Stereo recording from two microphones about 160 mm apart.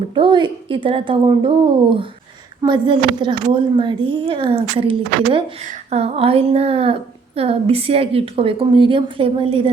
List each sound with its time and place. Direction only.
0.1 s a woman's voice: 30° right (ahead or behind)